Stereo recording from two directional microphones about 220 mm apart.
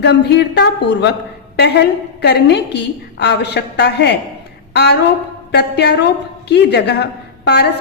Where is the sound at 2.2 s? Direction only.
50° left (ahead or behind).